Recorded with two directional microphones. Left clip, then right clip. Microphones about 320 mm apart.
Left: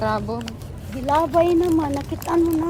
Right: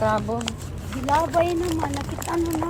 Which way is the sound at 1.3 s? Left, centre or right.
Left.